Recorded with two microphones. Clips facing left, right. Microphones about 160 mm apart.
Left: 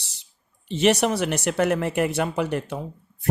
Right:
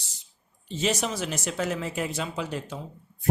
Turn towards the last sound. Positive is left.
turn(degrees=65)  # may be behind; listen again after turning